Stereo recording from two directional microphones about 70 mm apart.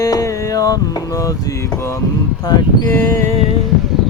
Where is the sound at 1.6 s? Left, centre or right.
Left.